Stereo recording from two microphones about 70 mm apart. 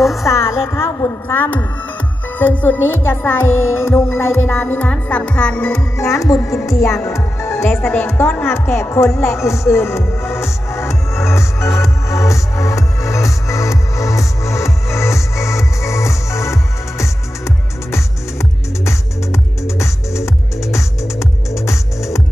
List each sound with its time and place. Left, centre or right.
0.2 s a woman's voice: left
1.3 s speech: left
5.0 s speech: centre
5.8 s speech: left
8.4 s music: left